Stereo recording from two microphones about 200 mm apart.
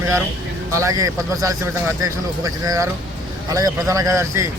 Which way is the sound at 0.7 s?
15° right (ahead or behind).